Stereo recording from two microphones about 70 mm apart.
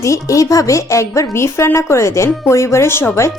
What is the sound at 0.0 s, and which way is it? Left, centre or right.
Speech, left.